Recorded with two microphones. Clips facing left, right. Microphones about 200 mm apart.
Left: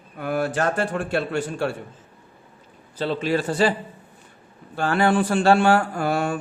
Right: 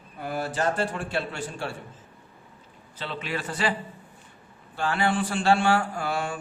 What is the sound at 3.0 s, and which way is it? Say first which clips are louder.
Speech: left 10 dB; 35° left (ahead or behind).